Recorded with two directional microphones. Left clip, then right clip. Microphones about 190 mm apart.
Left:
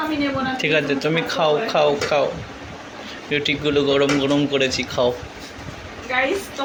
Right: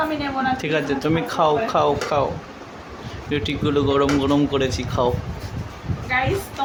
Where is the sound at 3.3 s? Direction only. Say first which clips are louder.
Left 2 dB; 15° right (ahead or behind).